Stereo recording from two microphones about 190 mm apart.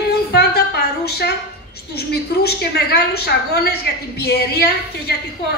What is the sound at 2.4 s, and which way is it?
A woman's voice, 55° left (ahead or behind).